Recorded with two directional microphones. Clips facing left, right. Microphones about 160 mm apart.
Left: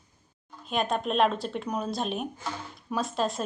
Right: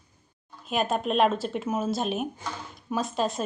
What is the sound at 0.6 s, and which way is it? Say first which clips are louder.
A woman's voice: right 2 dB; 5° right (ahead or behind).